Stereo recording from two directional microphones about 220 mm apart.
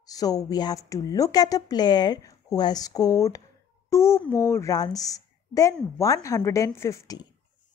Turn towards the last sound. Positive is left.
turn(degrees=15)  # may be behind; listen again after turning